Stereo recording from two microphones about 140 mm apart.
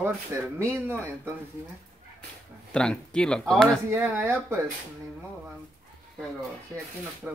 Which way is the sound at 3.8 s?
15° right (ahead or behind).